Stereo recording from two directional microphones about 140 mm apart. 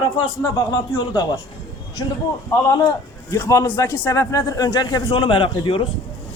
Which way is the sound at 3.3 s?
20° left (ahead or behind).